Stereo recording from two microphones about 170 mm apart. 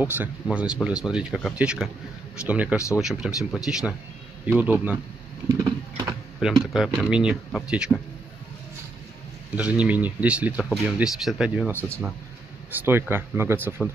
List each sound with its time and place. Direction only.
0.0 s speech: 10° right (ahead or behind)
5.5 s typing: 20° right (ahead or behind)
6.4 s speech: 5° right (ahead or behind)
9.6 s speech: 10° right (ahead or behind)